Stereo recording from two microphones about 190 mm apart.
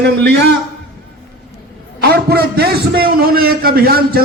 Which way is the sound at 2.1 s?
55° right (ahead or behind).